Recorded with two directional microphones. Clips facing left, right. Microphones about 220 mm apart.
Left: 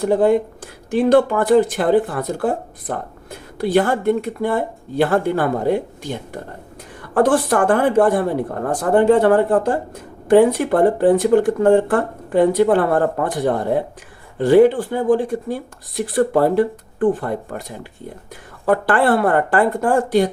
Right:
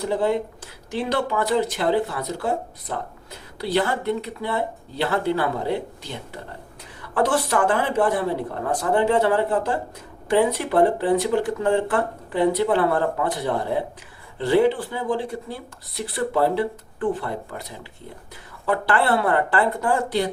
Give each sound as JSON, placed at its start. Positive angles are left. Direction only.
{"t": 0.0, "sound": "a woman's voice", "side_deg": 50}